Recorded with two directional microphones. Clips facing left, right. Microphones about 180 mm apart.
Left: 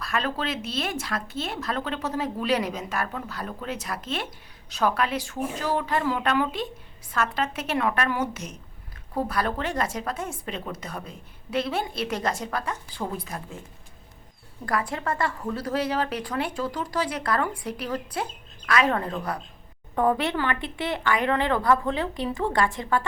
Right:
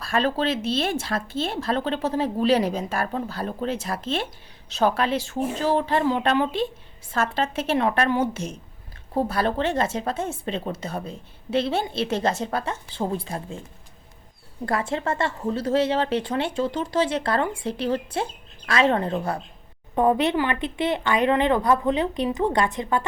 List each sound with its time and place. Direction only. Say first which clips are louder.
0.0 s a woman's voice: right 5 dB; 30° right (ahead or behind)
14.6 s a woman's voice: right 3 dB; 25° right (ahead or behind)